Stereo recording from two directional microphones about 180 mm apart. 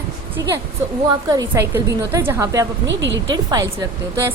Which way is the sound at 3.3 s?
20° right (ahead or behind).